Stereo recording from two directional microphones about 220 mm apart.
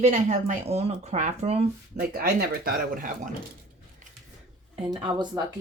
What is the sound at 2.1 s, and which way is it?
A woman's voice, 45° right (ahead or behind).